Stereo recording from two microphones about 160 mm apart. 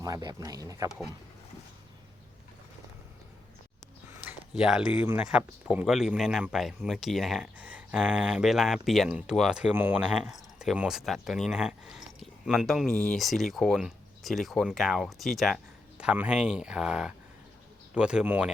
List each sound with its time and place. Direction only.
0.0 s speech: 25° right (ahead or behind)
4.2 s speech: 5° right (ahead or behind)